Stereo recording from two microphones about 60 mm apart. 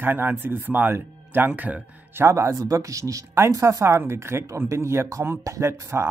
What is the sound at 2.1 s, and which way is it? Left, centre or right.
Speech, right.